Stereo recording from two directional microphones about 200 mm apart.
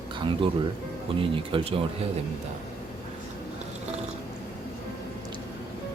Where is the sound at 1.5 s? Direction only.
25° right (ahead or behind).